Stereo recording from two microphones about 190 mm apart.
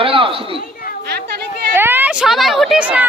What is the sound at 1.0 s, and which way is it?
Chatter, 60° right (ahead or behind).